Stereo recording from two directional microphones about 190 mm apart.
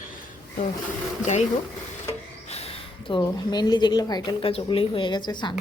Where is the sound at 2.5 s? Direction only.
30° left (ahead or behind).